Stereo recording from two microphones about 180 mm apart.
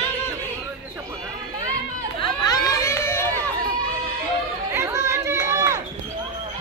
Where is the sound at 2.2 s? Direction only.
20° left (ahead or behind).